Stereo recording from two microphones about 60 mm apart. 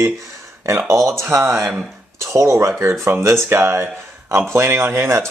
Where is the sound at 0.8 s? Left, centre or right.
Right.